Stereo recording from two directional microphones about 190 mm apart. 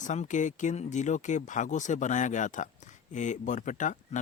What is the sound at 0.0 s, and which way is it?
Speech, 40° left (ahead or behind).